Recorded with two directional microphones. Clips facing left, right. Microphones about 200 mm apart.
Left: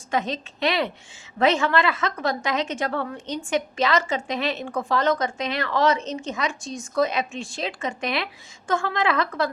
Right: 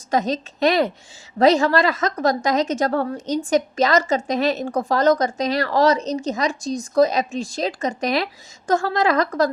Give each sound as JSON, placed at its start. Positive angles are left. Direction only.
{"t": 0.1, "sound": "a woman's voice", "side_deg": -40}